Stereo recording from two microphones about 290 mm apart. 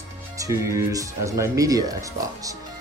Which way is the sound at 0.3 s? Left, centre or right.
Centre.